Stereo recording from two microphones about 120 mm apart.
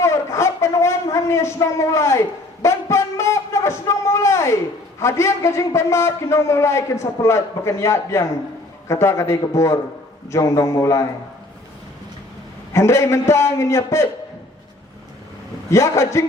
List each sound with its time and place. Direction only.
0.0 s a sound: 25° left (ahead or behind)
4.9 s a man's voice: 25° left (ahead or behind)
12.7 s a man's voice: 20° left (ahead or behind)
15.7 s a man's voice: 25° left (ahead or behind)